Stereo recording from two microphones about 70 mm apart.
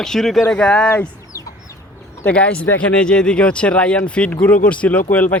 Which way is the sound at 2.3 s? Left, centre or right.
Centre.